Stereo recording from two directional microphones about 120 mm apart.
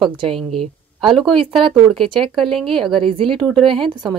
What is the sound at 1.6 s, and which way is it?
Speech, 45° right (ahead or behind).